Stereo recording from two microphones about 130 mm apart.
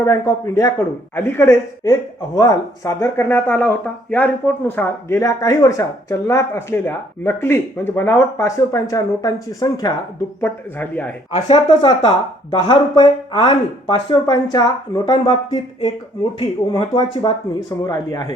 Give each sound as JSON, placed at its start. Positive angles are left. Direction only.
{"t": 0.0, "sound": "speech", "side_deg": 25}
{"t": 1.8, "sound": "speech", "side_deg": 30}
{"t": 10.4, "sound": "speech", "side_deg": 15}
{"t": 11.3, "sound": "speech", "side_deg": 35}
{"t": 16.9, "sound": "speech", "side_deg": 30}